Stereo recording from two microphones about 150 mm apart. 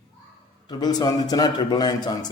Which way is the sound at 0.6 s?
25° left (ahead or behind).